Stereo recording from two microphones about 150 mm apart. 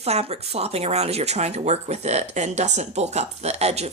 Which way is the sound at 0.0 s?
45° right (ahead or behind).